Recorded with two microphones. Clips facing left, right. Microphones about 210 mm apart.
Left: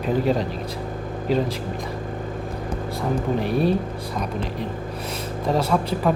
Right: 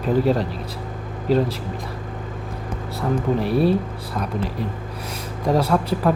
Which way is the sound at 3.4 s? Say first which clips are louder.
Right 3 dB; 35° right (ahead or behind).